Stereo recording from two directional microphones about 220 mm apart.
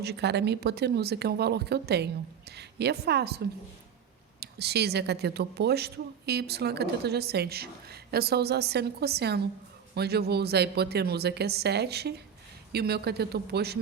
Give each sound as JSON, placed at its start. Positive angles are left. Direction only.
{"t": 0.0, "sound": "a woman's voice", "side_deg": -50}